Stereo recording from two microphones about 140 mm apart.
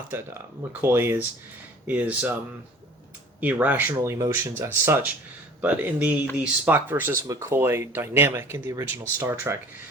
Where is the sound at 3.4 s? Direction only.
10° right (ahead or behind).